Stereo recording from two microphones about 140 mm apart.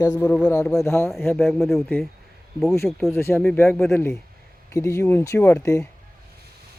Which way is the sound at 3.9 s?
15° left (ahead or behind).